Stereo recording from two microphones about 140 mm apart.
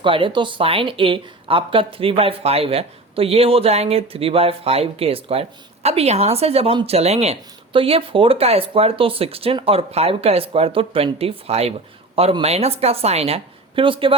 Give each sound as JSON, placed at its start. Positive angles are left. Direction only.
{"t": 0.0, "sound": "speech", "side_deg": -35}